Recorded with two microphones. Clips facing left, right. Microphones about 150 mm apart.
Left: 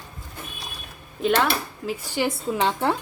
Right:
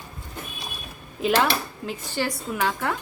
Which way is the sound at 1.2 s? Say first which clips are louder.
Even; 5° right (ahead or behind).